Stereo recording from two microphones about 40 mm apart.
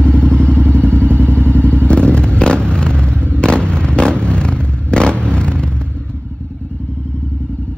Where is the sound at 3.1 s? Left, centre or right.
Right.